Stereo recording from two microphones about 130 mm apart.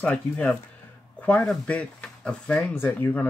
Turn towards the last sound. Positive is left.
turn(degrees=15)  # may be behind; listen again after turning